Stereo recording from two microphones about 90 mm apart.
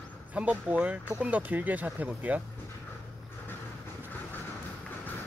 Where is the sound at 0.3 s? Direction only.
15° right (ahead or behind).